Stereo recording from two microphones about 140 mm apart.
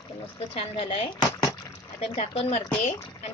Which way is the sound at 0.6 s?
40° left (ahead or behind).